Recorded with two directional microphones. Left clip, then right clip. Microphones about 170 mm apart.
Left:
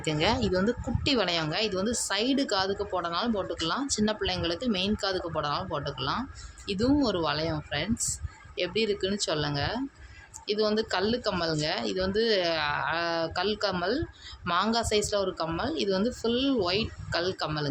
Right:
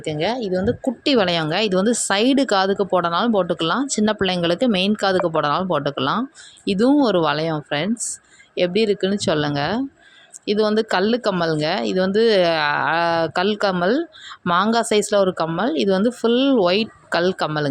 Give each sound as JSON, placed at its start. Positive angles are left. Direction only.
{"t": 0.0, "sound": "speech", "side_deg": -25}
{"t": 1.0, "sound": "speech", "side_deg": -40}